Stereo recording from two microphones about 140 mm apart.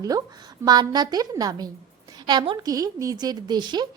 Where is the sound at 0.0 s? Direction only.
25° right (ahead or behind).